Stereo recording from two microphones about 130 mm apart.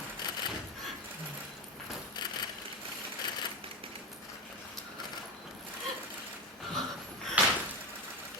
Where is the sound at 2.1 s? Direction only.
35° left (ahead or behind).